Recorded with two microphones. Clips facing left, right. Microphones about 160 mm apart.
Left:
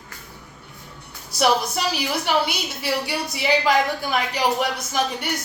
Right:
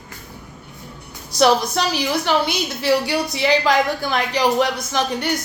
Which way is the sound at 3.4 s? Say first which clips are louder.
Right 2 dB; 90° right.